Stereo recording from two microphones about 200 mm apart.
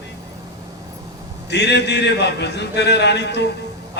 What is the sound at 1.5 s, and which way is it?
A man's voice, 60° left (ahead or behind).